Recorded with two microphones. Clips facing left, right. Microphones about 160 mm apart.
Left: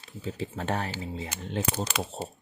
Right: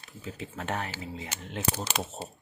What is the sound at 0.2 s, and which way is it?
Speech, 30° left (ahead or behind).